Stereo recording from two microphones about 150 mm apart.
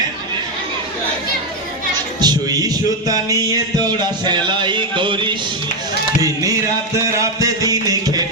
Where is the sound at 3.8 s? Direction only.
30° right (ahead or behind).